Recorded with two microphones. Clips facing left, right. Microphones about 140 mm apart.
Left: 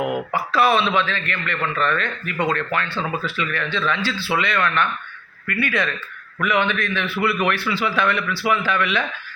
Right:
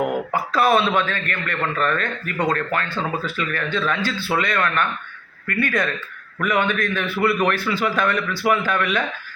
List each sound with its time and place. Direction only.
0.5 s a man's voice: 45° right (ahead or behind)